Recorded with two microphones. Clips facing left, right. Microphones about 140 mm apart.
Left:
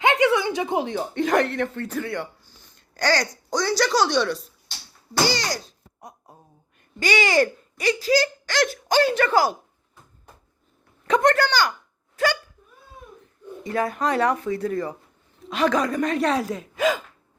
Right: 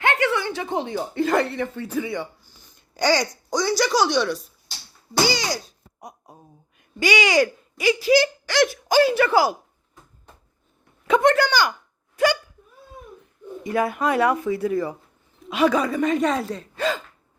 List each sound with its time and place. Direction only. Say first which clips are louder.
0.0 s a sound: left 3 dB; 15° left (ahead or behind)
0.9 s speech: even; 5° right (ahead or behind)
11.0 s speech: right 1 dB; 5° right (ahead or behind)
12.1 s hiccup: right 3 dB; 15° right (ahead or behind)
13.7 s speech: right 2 dB; 10° right (ahead or behind); by 17.0 s 10° left (ahead or behind)